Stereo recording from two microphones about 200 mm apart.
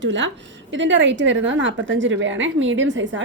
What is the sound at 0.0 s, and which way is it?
A woman's voice, 65° right (ahead or behind).